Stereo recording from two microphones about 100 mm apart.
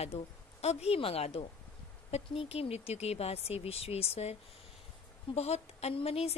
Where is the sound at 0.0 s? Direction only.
90° left.